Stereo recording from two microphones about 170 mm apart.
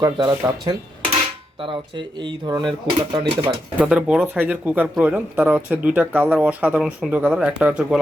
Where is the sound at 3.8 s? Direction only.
5° right (ahead or behind).